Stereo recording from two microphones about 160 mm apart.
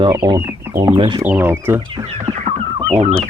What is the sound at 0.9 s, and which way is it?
Speech, 30° right (ahead or behind).